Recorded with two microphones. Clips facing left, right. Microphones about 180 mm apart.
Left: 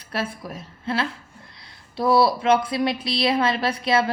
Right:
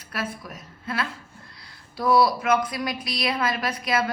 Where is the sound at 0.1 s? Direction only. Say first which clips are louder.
Left 3 dB; 30° left (ahead or behind).